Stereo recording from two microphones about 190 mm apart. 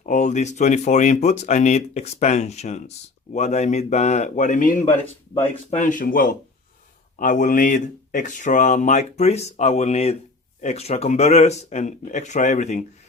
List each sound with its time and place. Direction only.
0.0 s speech: 40° left (ahead or behind)